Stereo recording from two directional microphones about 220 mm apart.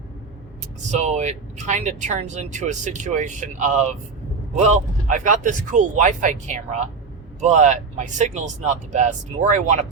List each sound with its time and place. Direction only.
0.9 s speech: 30° right (ahead or behind)